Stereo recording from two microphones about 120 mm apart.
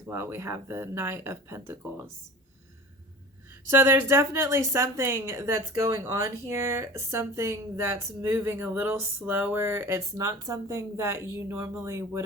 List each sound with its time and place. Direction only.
0.0 s speech: 20° right (ahead or behind)
3.7 s speech: 20° right (ahead or behind)